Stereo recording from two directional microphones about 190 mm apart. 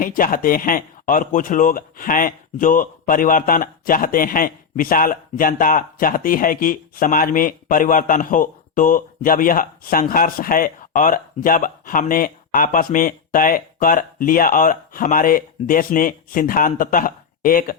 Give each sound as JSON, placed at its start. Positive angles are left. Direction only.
{"t": 0.0, "sound": "speech", "side_deg": 45}